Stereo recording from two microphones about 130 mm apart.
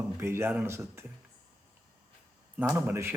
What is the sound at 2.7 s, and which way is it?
Speech, 20° right (ahead or behind).